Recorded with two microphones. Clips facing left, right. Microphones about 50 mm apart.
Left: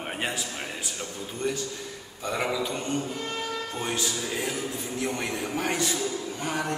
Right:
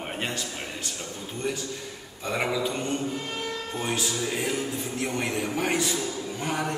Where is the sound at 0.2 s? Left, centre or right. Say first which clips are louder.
Left 2 dB; centre.